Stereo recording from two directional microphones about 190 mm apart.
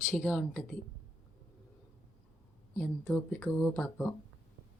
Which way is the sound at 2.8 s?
5° left (ahead or behind).